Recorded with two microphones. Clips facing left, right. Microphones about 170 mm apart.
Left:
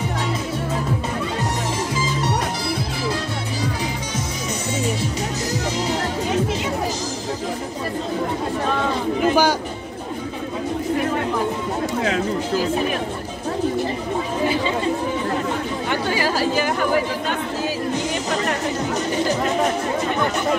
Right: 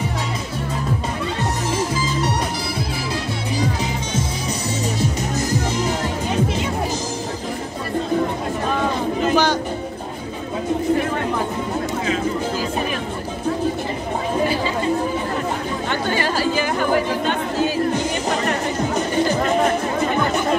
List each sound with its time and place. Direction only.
4.8 s music: 45° right (ahead or behind)
9.2 s chatter: 10° left (ahead or behind)
12.0 s a sound: 70° left (ahead or behind)
15.9 s chatter: 5° left (ahead or behind)